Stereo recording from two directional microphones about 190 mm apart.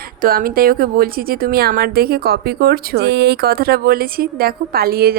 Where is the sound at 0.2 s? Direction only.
50° right (ahead or behind).